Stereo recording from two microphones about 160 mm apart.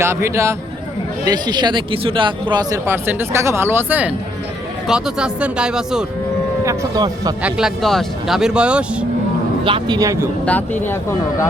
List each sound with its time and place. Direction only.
0.0 s a man's voice: 15° right (ahead or behind)
6.7 s speech: 25° right (ahead or behind)
7.4 s speech: centre (ahead or behind)
9.6 s speech: 30° right (ahead or behind)
10.4 s speech: 10° left (ahead or behind)